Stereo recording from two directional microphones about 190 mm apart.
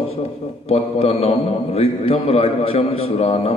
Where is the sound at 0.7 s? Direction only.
30° left (ahead or behind).